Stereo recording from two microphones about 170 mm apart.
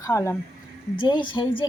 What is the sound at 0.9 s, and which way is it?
Speech, 25° left (ahead or behind).